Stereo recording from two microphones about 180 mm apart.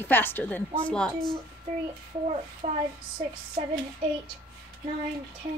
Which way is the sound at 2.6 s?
35° right (ahead or behind).